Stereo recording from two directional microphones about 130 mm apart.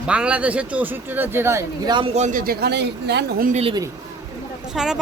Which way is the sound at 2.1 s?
65° right (ahead or behind).